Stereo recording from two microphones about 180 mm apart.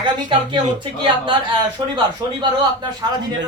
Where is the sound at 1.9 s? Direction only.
25° right (ahead or behind).